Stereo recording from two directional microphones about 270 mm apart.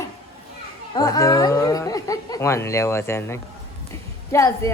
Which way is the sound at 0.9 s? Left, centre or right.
Centre.